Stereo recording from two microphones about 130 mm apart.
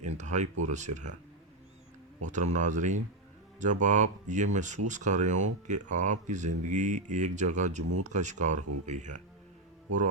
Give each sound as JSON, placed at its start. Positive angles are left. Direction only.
{"t": 0.2, "sound": "speech", "side_deg": -65}
{"t": 2.2, "sound": "speech", "side_deg": -65}